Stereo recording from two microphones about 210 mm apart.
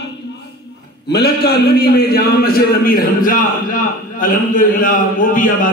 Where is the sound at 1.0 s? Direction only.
50° left (ahead or behind).